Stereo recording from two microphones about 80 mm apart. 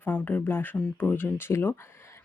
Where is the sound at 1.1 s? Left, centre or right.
Left.